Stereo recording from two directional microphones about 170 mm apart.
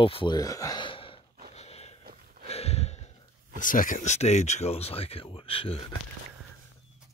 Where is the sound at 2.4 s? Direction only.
35° left (ahead or behind).